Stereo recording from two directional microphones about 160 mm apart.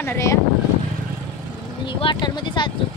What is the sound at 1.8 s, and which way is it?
Speech, 30° left (ahead or behind).